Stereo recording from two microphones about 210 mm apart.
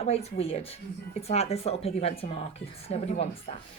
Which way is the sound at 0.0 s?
30° left (ahead or behind).